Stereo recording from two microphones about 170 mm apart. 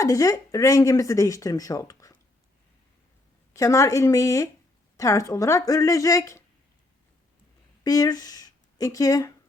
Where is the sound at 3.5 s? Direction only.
20° left (ahead or behind).